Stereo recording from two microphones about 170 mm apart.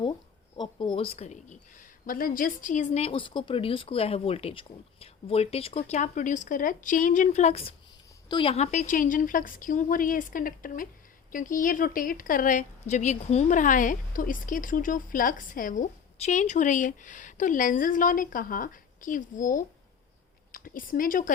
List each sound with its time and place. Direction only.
0.5 s speech: 25° left (ahead or behind)
2.0 s a woman's voice: 55° left (ahead or behind)